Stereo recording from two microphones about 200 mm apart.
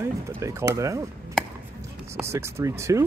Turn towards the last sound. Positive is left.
turn(degrees=-15)  # may be behind; listen again after turning